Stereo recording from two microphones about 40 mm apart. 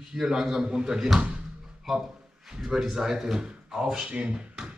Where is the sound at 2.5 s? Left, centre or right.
Centre.